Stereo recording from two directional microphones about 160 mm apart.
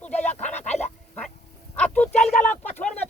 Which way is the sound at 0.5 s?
45° left (ahead or behind).